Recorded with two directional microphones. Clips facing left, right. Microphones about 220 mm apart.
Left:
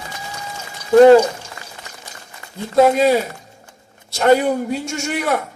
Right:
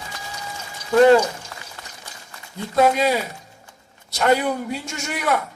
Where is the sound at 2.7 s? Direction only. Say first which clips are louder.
Left 5 dB; 30° left (ahead or behind).